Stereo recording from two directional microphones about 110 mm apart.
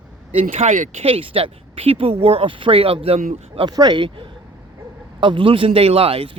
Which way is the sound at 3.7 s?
40° right (ahead or behind).